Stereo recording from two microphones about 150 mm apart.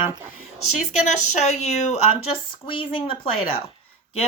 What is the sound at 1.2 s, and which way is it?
Speech, 50° left (ahead or behind).